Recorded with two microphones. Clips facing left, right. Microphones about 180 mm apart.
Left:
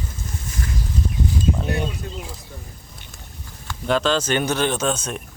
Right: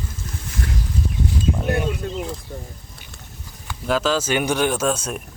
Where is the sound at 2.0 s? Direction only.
55° right (ahead or behind).